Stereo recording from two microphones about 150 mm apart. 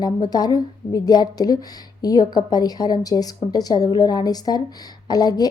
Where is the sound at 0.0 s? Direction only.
25° left (ahead or behind).